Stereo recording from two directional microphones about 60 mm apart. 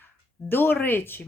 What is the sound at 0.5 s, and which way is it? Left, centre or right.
Speech, left.